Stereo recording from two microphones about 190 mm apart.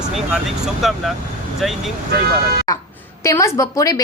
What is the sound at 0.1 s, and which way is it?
Speech, centre (ahead or behind).